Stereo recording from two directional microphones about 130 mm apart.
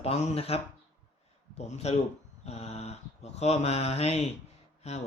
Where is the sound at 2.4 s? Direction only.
55° left (ahead or behind).